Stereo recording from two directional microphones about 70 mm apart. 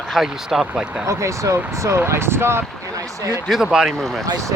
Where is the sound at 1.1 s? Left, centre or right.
Right.